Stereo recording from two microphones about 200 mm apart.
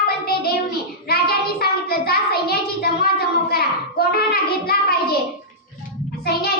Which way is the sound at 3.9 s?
50° left (ahead or behind).